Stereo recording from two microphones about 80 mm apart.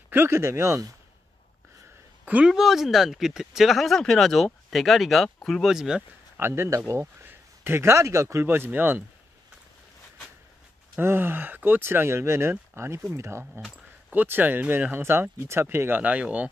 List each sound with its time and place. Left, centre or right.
0.1 s speech: right
2.4 s speech: centre
6.3 s speech: right
11.0 s speech: right
16.0 s speech: centre